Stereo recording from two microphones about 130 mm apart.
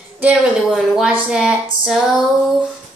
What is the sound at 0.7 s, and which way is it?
A woman's voice, centre (ahead or behind).